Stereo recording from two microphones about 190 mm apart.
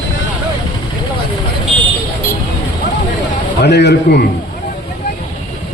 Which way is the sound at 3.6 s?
65° left (ahead or behind).